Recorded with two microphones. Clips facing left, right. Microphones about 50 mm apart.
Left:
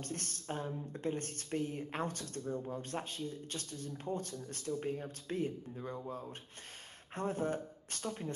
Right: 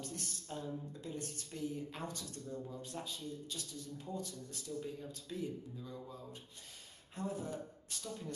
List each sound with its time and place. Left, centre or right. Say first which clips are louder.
0.0 s speech: left 3 dB; left